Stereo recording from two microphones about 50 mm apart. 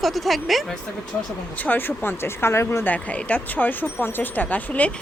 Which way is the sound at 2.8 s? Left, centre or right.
Left.